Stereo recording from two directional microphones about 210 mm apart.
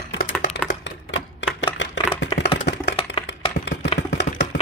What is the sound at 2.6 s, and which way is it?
Chopping, 55° left (ahead or behind).